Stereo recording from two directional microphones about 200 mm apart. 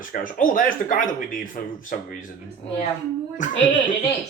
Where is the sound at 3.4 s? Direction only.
40° left (ahead or behind).